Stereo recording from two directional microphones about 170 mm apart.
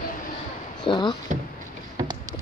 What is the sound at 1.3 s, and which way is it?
Drawer open or close, 50° right (ahead or behind).